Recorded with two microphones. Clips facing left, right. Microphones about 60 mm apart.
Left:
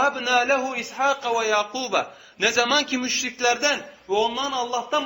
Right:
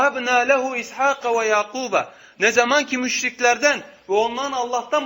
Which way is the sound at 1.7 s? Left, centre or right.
Centre.